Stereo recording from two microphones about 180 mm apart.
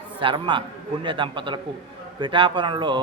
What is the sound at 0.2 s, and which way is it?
A man's voice, 25° right (ahead or behind).